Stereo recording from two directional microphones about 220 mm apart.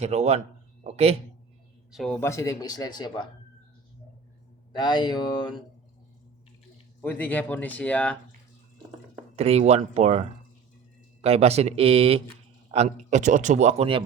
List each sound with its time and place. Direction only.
0.0 s speech: 30° right (ahead or behind)
1.9 s speech: centre (ahead or behind); by 3.2 s 20° left (ahead or behind)
4.7 s speech: 20° left (ahead or behind)
7.0 s speech: 10° left (ahead or behind)
9.3 s speech: 25° right (ahead or behind)